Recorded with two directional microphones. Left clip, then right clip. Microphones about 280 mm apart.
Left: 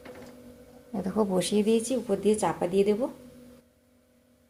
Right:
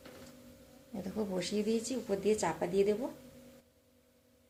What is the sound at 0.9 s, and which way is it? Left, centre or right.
A woman's voice, left.